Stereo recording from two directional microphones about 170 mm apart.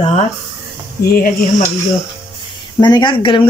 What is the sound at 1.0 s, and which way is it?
Speech, 60° left (ahead or behind).